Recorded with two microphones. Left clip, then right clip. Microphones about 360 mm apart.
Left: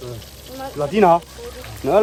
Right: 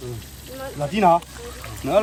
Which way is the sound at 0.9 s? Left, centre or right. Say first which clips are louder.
Left 3 dB; left.